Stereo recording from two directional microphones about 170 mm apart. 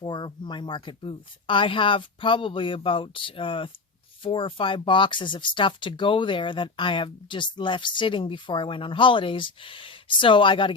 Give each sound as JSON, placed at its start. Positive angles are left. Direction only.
{"t": 0.0, "sound": "speech", "side_deg": 25}